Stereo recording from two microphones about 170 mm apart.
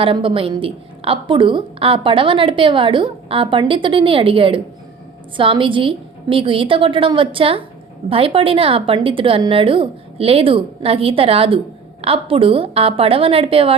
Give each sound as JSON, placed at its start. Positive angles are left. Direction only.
{"t": 0.0, "sound": "a woman's voice", "side_deg": -30}